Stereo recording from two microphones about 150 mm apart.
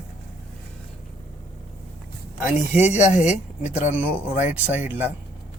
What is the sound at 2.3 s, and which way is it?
Speech, 15° right (ahead or behind).